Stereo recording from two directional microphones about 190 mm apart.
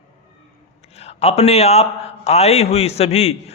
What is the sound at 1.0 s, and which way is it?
A man's voice, 35° left (ahead or behind).